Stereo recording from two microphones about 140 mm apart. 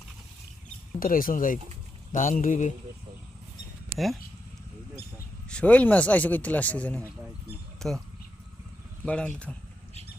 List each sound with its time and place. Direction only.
0.9 s speech: 85° left
2.1 s mantra: 70° left (ahead or behind)
3.9 s speech: centre (ahead or behind)
5.5 s speech: 10° left (ahead or behind)
9.0 s speech: 10° left (ahead or behind)